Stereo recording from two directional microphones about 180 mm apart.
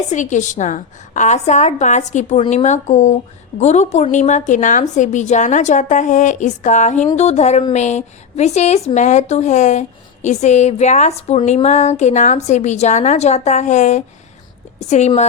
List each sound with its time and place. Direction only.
0.1 s a woman's voice: 40° left (ahead or behind)